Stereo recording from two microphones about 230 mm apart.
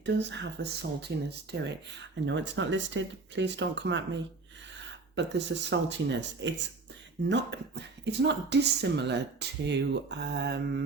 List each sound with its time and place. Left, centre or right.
0.0 s speech: right